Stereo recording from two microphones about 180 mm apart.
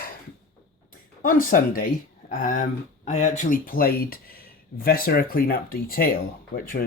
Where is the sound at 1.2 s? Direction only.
50° left (ahead or behind).